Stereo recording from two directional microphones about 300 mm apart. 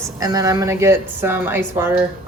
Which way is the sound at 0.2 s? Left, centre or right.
Centre.